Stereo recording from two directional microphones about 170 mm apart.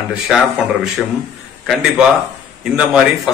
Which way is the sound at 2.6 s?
5° right (ahead or behind).